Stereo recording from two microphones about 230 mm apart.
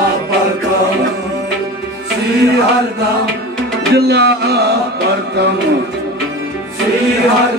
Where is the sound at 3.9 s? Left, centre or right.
Right.